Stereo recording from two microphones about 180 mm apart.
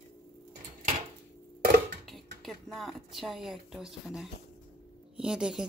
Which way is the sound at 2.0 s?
Centre (ahead or behind).